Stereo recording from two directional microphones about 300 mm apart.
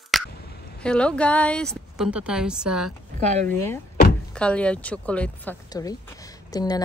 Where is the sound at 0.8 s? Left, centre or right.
Centre.